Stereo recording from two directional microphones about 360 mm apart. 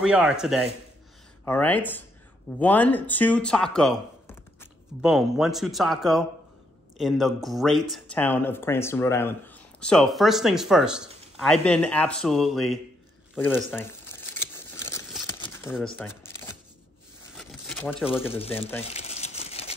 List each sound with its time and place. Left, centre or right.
0.0 s speech: centre
13.3 s crumpling: centre
15.9 s a sound: centre
18.3 s crumpling: centre